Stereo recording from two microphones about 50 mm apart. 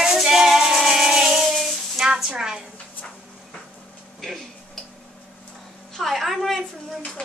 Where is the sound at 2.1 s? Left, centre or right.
Centre.